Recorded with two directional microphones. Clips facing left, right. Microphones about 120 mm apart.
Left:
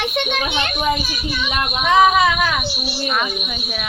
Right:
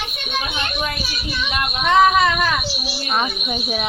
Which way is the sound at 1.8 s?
5° left (ahead or behind).